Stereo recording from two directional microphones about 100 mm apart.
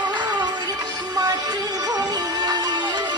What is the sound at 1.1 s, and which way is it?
Music, 40° right (ahead or behind).